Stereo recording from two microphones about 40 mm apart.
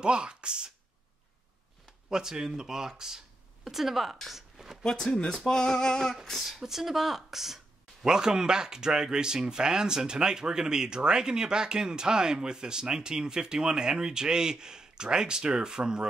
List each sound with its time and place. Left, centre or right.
0.0 s speech: right
2.0 s a woman's voice: centre
4.3 s a sound: centre
4.8 s speech: centre
6.6 s speech: centre